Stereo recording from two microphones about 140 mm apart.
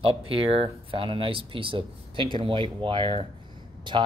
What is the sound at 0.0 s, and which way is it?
Speech, 45° right (ahead or behind).